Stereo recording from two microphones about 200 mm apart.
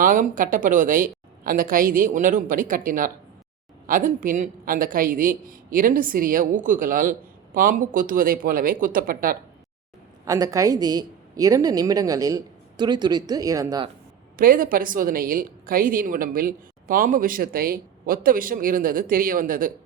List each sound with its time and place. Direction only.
0.0 s a man's voice: 40° right (ahead or behind)
10.2 s a woman's voice: 15° right (ahead or behind)
14.3 s a man's voice: 45° right (ahead or behind)